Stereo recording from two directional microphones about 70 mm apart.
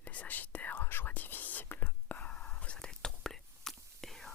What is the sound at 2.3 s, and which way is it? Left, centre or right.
Whispering, centre.